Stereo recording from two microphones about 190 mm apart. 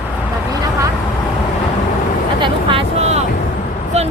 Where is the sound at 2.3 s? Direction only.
25° right (ahead or behind).